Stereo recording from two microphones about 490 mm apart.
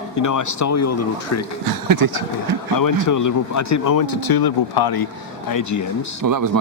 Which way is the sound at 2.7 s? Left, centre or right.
Left.